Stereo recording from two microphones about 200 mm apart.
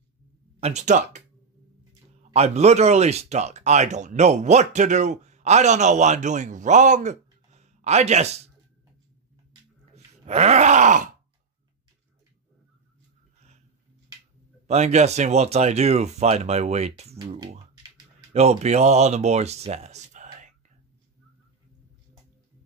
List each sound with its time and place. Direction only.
0.6 s speech: 35° right (ahead or behind)
2.3 s speech: 30° right (ahead or behind)
9.9 s groan: 35° right (ahead or behind)
14.7 s speech: 35° right (ahead or behind)
17.2 s speech: 20° right (ahead or behind)
18.3 s speech: 35° right (ahead or behind)